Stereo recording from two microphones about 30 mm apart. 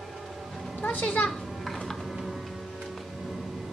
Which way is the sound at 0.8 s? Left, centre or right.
Left.